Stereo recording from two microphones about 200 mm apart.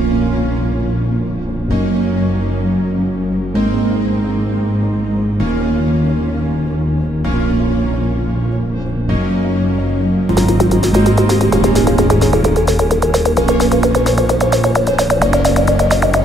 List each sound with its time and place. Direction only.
10.2 s music: centre (ahead or behind)